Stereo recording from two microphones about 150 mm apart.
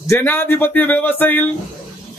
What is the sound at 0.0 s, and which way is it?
Speech, 15° left (ahead or behind).